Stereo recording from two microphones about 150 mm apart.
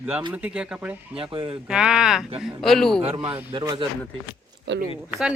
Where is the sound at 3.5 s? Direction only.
30° right (ahead or behind).